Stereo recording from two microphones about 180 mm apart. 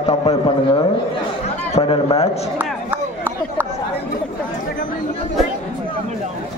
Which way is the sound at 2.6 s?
10° right (ahead or behind).